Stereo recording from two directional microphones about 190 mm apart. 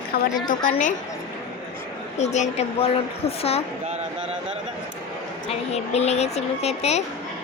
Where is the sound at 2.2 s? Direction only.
35° left (ahead or behind).